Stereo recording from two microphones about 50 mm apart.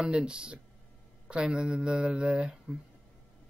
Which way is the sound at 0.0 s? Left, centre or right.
Centre.